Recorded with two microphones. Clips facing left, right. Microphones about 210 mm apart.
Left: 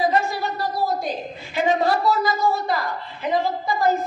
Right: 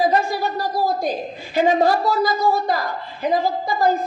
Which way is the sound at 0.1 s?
40° right (ahead or behind).